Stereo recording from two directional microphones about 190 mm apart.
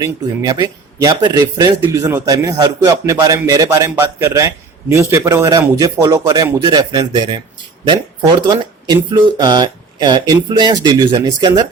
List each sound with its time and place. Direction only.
0.0 s speech: 20° right (ahead or behind)